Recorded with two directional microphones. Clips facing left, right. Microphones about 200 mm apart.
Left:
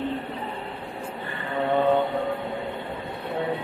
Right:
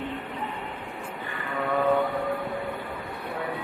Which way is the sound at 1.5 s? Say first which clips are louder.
Left 3 dB; 25° left (ahead or behind).